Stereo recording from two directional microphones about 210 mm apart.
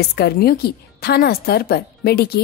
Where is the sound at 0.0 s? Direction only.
50° left (ahead or behind).